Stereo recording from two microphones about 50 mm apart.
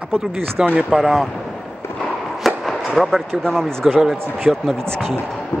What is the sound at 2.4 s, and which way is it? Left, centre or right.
Chop, centre.